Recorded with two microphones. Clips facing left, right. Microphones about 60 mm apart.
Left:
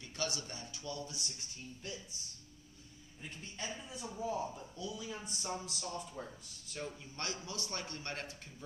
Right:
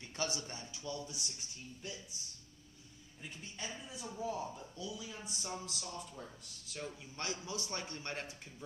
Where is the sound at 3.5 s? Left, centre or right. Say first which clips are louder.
Left 2 dB; centre.